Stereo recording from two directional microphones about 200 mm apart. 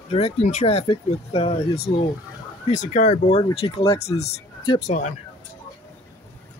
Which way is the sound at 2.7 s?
40° left (ahead or behind).